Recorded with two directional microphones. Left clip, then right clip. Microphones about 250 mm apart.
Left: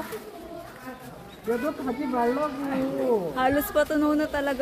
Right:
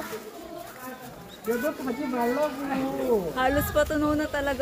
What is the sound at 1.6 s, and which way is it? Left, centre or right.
Speech, centre.